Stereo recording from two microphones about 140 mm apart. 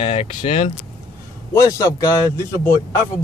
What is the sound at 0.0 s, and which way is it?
Speech, 45° left (ahead or behind).